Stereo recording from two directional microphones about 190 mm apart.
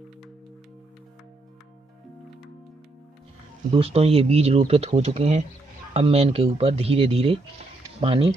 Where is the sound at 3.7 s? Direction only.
30° right (ahead or behind).